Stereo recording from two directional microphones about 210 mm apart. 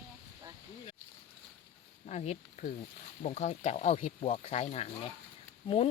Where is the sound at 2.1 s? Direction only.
30° left (ahead or behind).